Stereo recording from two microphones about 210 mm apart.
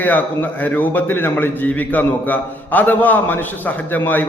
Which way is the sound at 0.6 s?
10° left (ahead or behind).